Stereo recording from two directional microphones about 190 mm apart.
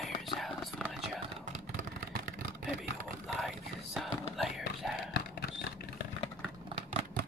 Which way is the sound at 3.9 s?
Centre (ahead or behind).